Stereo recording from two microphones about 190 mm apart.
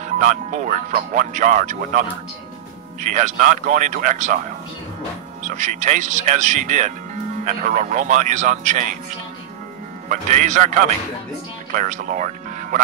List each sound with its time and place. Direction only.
0.0 s speech: 40° right (ahead or behind)
10.0 s speech: 40° right (ahead or behind)
11.8 s speech: 40° right (ahead or behind)